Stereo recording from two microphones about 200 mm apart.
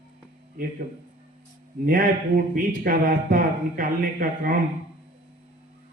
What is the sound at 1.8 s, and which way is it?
A man's voice, 45° right (ahead or behind).